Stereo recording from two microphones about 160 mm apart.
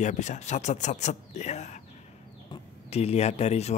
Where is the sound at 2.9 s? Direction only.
40° left (ahead or behind).